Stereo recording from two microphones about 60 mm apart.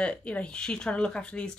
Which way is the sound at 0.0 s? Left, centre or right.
Left.